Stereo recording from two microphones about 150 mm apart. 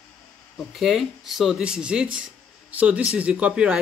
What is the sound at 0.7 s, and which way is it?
Speech, centre (ahead or behind).